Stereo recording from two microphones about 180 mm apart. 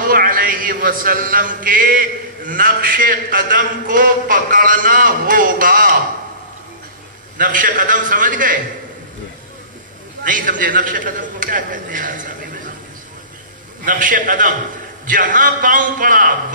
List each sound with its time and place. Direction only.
0.0 s a man's voice: 55° right (ahead or behind)
7.3 s a man's voice: 45° right (ahead or behind)
10.2 s a man's voice: 50° right (ahead or behind)
13.8 s a man's voice: 50° right (ahead or behind)